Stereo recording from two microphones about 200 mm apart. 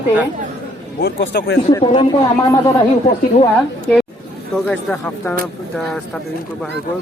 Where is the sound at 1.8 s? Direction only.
25° left (ahead or behind).